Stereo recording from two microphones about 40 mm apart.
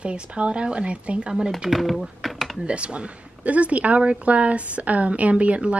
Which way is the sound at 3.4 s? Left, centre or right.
Right.